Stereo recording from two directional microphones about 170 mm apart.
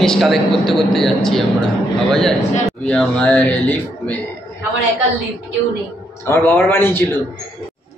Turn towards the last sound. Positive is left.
turn(degrees=10)  # may be behind; listen again after turning